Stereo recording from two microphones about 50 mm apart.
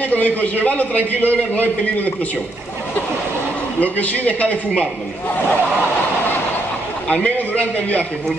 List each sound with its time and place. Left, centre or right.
0.1 s a man's voice: left
3.8 s a man's voice: left
7.2 s a man's voice: left